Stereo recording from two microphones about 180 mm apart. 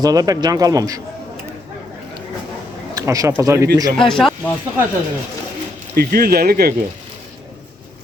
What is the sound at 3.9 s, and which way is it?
Speech, 5° left (ahead or behind).